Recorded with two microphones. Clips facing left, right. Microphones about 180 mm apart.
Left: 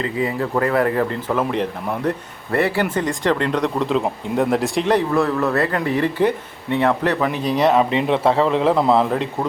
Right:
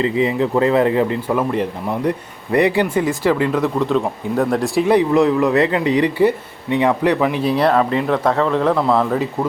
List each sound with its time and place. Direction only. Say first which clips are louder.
0.0 s speech: right 5 dB; 20° right (ahead or behind)
7.7 s speech: even; 20° left (ahead or behind)
8.3 s speech: even; 5° left (ahead or behind)